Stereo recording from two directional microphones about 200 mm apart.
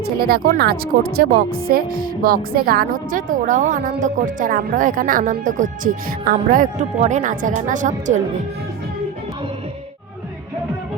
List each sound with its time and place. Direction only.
0.0 s a woman's voice: 50° right (ahead or behind)